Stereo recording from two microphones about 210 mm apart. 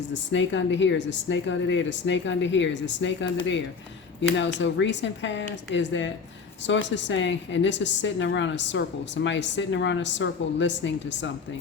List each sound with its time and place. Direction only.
0.1 s a woman's voice: 60° left (ahead or behind)